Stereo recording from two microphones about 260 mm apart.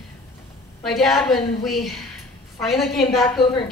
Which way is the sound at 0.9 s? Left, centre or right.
Centre.